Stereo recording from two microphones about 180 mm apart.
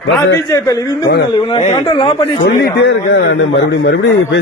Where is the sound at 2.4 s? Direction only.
70° left (ahead or behind).